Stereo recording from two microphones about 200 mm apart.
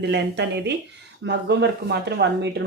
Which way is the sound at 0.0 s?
55° right (ahead or behind).